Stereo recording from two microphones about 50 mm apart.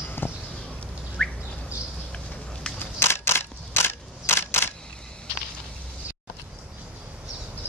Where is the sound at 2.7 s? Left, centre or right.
Left.